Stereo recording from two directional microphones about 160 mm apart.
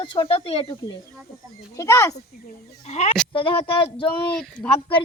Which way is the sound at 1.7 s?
20° left (ahead or behind).